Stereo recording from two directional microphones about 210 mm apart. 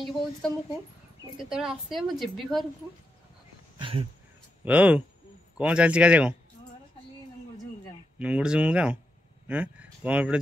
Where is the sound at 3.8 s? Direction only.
25° right (ahead or behind).